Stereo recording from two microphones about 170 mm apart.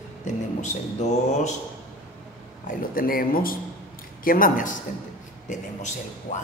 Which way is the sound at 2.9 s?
60° left (ahead or behind).